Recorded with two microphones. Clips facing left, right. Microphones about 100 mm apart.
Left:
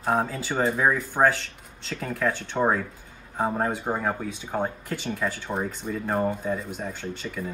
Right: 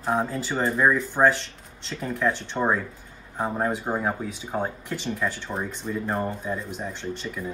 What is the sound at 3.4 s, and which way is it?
Speech, centre (ahead or behind).